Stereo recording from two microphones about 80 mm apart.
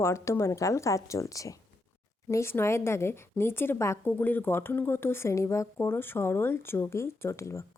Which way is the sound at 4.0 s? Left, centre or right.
Left.